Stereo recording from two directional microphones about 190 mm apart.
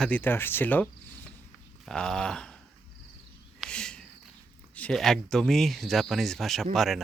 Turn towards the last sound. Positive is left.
turn(degrees=0)  # may be behind; listen again after turning